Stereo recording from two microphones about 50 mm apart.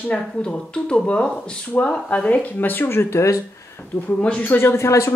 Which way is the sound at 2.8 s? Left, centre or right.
Left.